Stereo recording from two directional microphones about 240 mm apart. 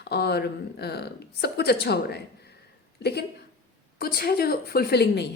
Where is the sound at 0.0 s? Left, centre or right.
Left.